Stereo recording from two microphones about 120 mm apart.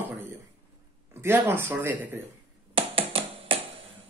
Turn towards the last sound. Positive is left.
turn(degrees=-50)  # may be behind; listen again after turning